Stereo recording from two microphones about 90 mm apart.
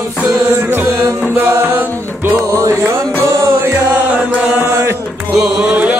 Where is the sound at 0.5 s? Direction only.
25° right (ahead or behind).